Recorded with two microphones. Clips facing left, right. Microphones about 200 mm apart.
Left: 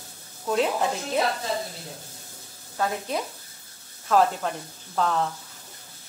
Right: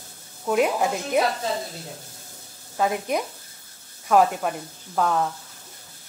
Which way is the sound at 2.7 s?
15° right (ahead or behind).